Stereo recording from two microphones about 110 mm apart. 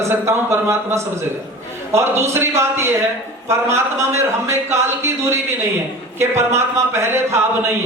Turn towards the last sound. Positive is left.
turn(degrees=-25)  # may be behind; listen again after turning